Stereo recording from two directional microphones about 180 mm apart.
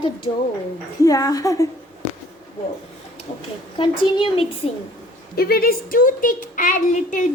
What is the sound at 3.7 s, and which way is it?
Speech, 30° left (ahead or behind).